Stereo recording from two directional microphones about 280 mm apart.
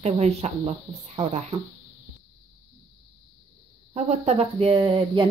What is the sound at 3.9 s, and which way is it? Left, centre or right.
Speech, right.